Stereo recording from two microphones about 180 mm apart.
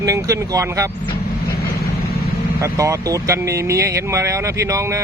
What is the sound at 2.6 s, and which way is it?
Speech, 15° right (ahead or behind).